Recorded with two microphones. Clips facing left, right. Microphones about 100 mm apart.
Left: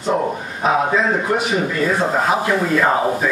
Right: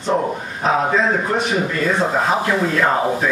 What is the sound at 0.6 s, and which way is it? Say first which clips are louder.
A man's voice: even; 10° left (ahead or behind).